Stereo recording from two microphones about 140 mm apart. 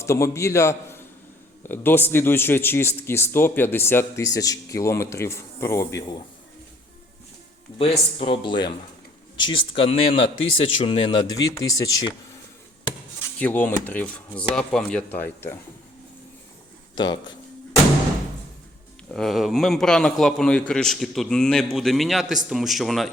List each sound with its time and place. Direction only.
0.0 s a man's voice: 20° left (ahead or behind)
7.8 s a man's voice: 40° left (ahead or behind); by 12.4 s 25° left (ahead or behind)
13.4 s speech: 15° left (ahead or behind)
16.9 s speech: 30° left (ahead or behind)
19.1 s a man's voice: centre (ahead or behind)